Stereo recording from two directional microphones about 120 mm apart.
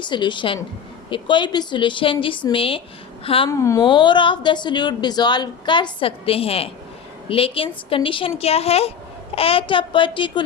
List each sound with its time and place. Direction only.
0.0 s a woman's voice: 40° left (ahead or behind)
3.5 s a woman's voice: 25° left (ahead or behind)
3.8 s a woman's voice: 40° left (ahead or behind)